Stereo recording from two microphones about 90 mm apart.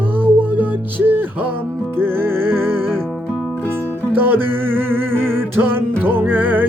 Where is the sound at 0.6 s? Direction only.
25° right (ahead or behind).